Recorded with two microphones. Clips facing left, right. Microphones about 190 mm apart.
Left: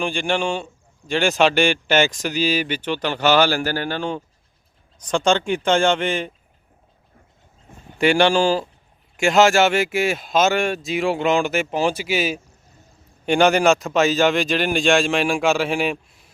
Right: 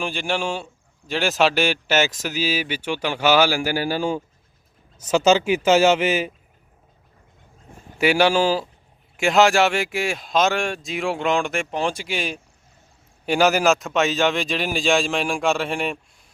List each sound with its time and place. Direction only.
0.0 s a man's voice: 5° right (ahead or behind)
7.9 s a man's voice: 5° right (ahead or behind)